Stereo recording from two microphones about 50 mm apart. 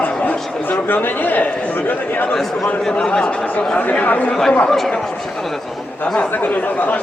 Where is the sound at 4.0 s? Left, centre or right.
Left.